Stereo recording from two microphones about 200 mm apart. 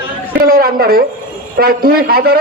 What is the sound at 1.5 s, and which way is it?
Speech, 50° right (ahead or behind).